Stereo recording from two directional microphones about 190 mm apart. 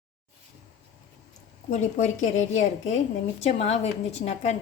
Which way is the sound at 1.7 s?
40° left (ahead or behind).